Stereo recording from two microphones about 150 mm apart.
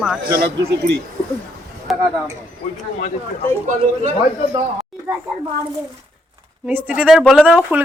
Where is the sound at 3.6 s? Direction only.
55° right (ahead or behind).